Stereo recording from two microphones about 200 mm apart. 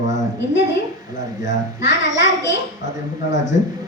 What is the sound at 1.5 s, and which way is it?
A child's voice, 65° left (ahead or behind).